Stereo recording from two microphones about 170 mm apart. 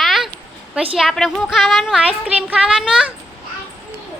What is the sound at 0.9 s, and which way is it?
A woman's voice, centre (ahead or behind).